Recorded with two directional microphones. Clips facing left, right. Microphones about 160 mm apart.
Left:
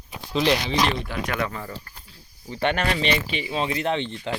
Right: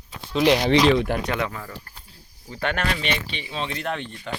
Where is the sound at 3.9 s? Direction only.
25° left (ahead or behind).